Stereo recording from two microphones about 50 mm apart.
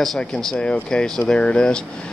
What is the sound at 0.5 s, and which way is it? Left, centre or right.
Speech, left.